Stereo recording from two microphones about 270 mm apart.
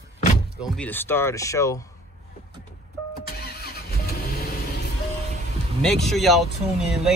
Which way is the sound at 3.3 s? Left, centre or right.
Left.